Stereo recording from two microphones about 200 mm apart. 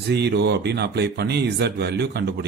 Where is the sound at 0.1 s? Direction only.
55° right (ahead or behind).